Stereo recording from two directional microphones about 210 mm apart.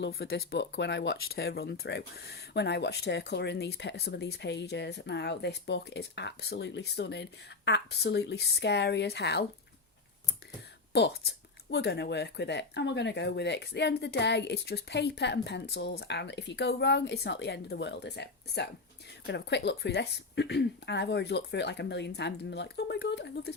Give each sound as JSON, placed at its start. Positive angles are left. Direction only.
{"t": 0.0, "sound": "speech", "side_deg": 50}
{"t": 10.9, "sound": "speech", "side_deg": 50}